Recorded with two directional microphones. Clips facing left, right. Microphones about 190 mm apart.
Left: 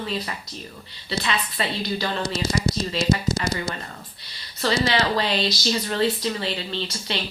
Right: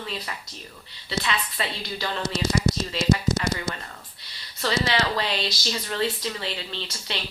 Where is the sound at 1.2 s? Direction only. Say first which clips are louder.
Left 4 dB; 30° left (ahead or behind).